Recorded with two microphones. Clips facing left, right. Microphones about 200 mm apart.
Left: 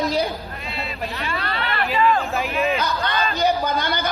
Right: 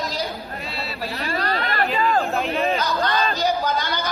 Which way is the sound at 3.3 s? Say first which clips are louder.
Left 1 dB; 55° left (ahead or behind).